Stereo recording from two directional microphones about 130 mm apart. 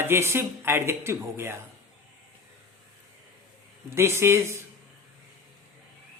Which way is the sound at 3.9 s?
20° right (ahead or behind).